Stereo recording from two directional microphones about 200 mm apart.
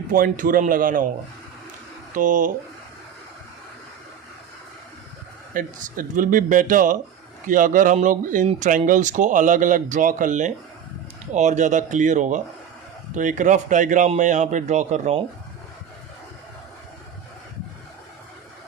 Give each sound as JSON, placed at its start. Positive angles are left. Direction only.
{"t": 0.1, "sound": "speech", "side_deg": -45}
{"t": 2.1, "sound": "speech", "side_deg": -40}
{"t": 5.5, "sound": "speech", "side_deg": -40}